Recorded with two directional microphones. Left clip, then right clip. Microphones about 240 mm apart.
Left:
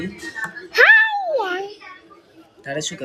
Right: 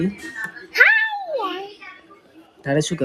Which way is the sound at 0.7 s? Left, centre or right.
Left.